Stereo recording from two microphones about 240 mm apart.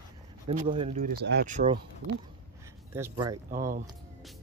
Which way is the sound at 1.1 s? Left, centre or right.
Right.